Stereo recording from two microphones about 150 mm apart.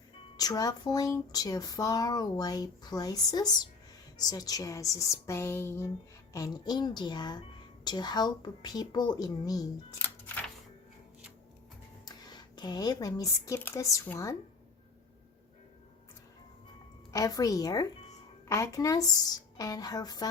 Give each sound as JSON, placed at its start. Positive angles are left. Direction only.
{"t": 0.3, "sound": "speech", "side_deg": 25}
{"t": 10.0, "sound": "a sound", "side_deg": 10}
{"t": 12.0, "sound": "speech", "side_deg": 25}
{"t": 17.1, "sound": "speech", "side_deg": 25}